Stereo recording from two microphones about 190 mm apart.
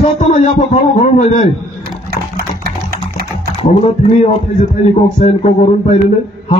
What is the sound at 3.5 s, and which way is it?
Speech, 35° left (ahead or behind).